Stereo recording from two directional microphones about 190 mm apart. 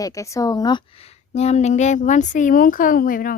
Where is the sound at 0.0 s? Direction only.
15° left (ahead or behind).